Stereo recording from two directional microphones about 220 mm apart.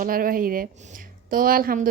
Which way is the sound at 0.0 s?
40° right (ahead or behind).